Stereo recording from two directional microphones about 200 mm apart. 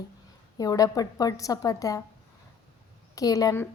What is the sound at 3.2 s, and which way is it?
Speech, 15° left (ahead or behind).